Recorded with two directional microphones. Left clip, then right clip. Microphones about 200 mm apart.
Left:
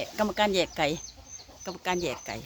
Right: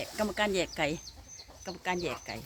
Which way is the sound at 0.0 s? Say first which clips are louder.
Left 5 dB; 15° left (ahead or behind).